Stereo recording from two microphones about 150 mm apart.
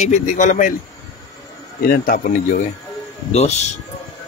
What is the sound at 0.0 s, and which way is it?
Speech, 55° left (ahead or behind).